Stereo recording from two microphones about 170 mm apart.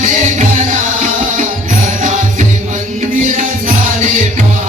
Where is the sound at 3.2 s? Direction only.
50° right (ahead or behind).